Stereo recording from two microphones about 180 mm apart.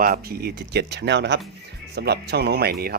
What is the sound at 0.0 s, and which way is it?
Speech, 55° right (ahead or behind).